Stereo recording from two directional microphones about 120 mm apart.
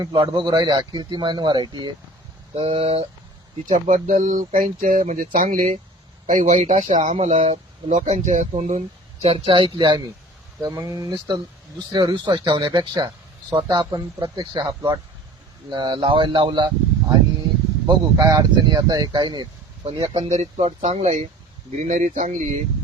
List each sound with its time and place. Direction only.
0.0 s a man's voice: 35° right (ahead or behind)
2.6 s speech: 50° right (ahead or behind)
3.7 s speech: 90° right
7.3 s speech: 55° right (ahead or behind)
7.9 s speech: 80° right
9.2 s a man's voice: 50° right (ahead or behind)
10.6 s a man's voice: 25° right (ahead or behind); by 16.6 s 45° right (ahead or behind)
17.8 s a man's voice: 35° right (ahead or behind)
19.8 s speech: 50° right (ahead or behind)
20.2 s speech: 65° right (ahead or behind)
21.8 s speech: 90° right